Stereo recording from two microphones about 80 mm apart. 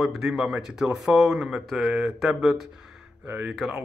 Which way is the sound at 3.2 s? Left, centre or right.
Right.